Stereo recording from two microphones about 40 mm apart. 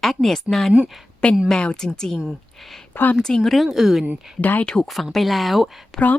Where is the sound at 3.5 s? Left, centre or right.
Centre.